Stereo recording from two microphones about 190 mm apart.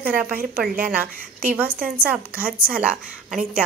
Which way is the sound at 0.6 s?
55° right (ahead or behind).